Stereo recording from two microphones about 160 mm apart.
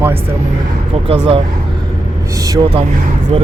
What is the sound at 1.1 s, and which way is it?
Speech, 35° right (ahead or behind).